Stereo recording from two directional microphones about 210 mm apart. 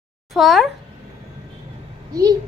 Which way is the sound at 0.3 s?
Centre (ahead or behind).